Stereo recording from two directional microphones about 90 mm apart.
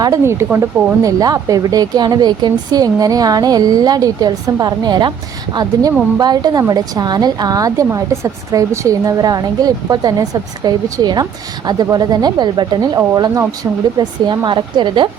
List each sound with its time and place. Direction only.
0.0 s speech: 35° right (ahead or behind)
1.0 s a woman's voice: 45° right (ahead or behind)
14.0 s speech: 55° right (ahead or behind)